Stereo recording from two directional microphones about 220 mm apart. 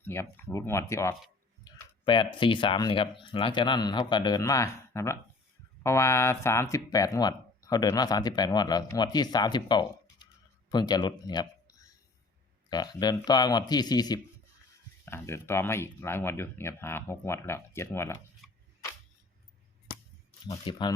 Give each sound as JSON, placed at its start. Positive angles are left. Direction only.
{"t": 0.0, "sound": "speech", "side_deg": 10}
{"t": 18.4, "sound": "a sound", "side_deg": 0}
{"t": 20.5, "sound": "speech", "side_deg": 20}